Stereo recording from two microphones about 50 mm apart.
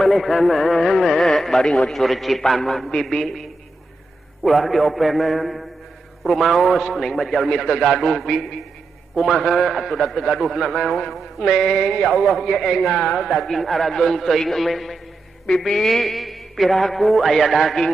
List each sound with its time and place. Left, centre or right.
0.0 s a man's voice: centre